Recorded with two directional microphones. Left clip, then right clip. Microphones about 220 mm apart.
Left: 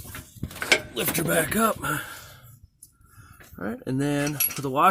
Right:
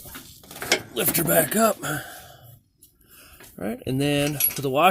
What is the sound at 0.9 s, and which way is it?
A man's voice, 15° right (ahead or behind).